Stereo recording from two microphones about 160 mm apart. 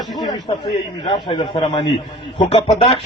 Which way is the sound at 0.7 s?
35° left (ahead or behind).